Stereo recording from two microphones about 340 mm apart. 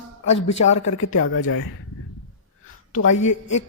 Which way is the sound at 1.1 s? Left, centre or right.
Left.